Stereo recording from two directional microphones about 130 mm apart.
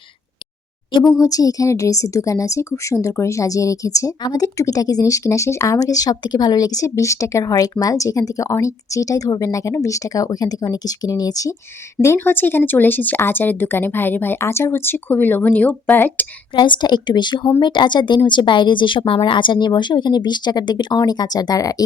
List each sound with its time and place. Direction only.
1.0 s a woman's voice: 25° left (ahead or behind)
12.0 s speech: 15° left (ahead or behind)
16.6 s speech: 35° left (ahead or behind)